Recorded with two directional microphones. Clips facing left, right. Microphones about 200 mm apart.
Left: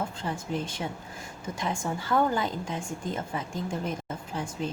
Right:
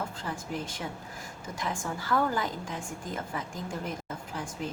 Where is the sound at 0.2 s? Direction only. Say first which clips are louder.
Left 4 dB; 25° left (ahead or behind).